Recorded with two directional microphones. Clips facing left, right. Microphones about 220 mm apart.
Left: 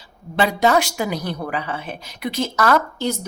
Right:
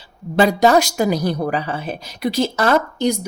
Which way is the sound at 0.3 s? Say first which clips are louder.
Right 4 dB; 40° right (ahead or behind).